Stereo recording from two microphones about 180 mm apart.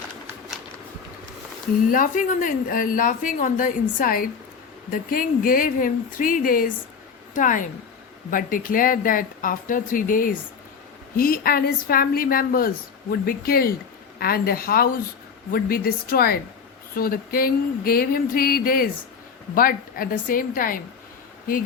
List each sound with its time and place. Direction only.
1.9 s a woman's voice: 50° left (ahead or behind)